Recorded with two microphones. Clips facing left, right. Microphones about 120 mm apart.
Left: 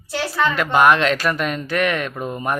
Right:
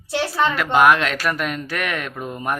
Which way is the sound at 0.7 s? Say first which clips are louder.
Left 1 dB; 5° right (ahead or behind).